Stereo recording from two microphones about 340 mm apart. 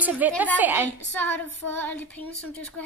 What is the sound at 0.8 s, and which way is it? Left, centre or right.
A woman's voice, centre.